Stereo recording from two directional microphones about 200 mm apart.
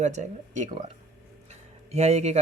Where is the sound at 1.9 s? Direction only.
35° right (ahead or behind).